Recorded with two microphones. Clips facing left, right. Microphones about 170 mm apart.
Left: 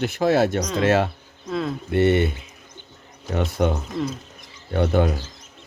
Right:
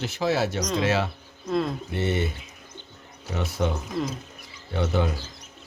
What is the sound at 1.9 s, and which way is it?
Speech, 65° left (ahead or behind).